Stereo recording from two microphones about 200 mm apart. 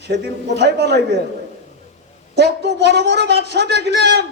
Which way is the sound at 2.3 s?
55° right (ahead or behind).